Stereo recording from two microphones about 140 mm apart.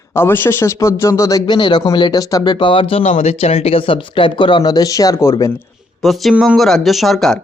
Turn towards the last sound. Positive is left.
turn(degrees=0)  # may be behind; listen again after turning